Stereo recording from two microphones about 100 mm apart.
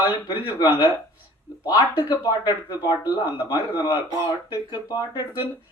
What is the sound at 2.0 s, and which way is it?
Speech, 45° left (ahead or behind).